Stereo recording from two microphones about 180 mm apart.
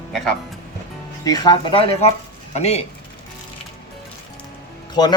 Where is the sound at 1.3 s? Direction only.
20° left (ahead or behind).